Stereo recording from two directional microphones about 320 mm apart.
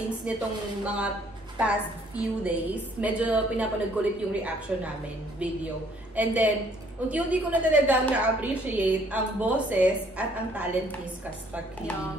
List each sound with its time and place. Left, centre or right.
0.3 s a woman's voice: centre